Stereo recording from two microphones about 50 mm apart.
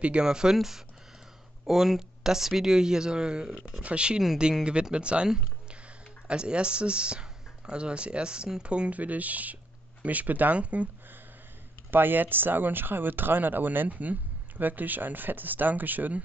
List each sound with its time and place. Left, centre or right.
0.0 s speech: centre
11.9 s speech: right